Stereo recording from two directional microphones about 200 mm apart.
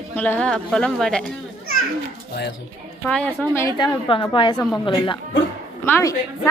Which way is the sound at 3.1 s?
5° left (ahead or behind).